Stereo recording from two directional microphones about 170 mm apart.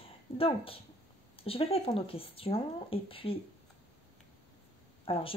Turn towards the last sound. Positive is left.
turn(degrees=35)  # may be behind; listen again after turning